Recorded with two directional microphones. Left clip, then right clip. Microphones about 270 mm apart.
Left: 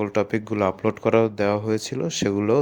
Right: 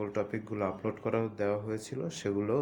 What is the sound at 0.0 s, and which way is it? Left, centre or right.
Speech, left.